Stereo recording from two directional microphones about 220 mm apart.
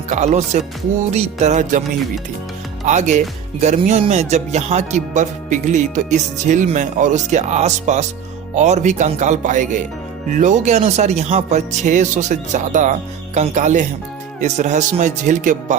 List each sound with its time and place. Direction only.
0.1 s speech: 35° right (ahead or behind)
2.8 s speech: 30° right (ahead or behind)